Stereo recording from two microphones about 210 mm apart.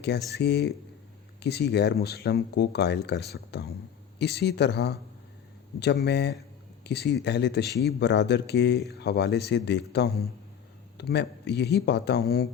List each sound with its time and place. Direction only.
0.3 s speech: 50° left (ahead or behind)